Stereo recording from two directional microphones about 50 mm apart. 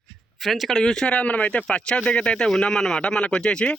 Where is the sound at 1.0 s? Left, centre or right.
Left.